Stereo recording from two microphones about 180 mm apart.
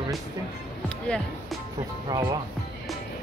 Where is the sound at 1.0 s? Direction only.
5° left (ahead or behind).